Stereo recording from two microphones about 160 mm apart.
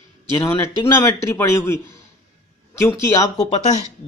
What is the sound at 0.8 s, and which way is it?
Speech, 15° left (ahead or behind).